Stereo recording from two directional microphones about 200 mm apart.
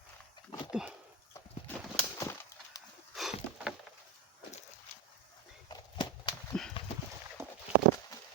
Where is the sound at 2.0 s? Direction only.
15° left (ahead or behind).